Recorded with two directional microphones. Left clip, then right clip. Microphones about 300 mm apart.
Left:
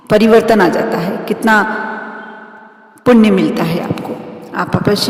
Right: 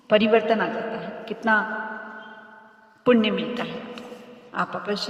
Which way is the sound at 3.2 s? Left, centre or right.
Centre.